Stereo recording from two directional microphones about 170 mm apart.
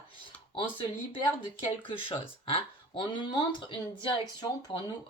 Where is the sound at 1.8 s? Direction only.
30° left (ahead or behind).